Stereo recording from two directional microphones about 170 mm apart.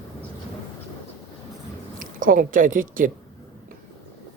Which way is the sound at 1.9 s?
55° right (ahead or behind).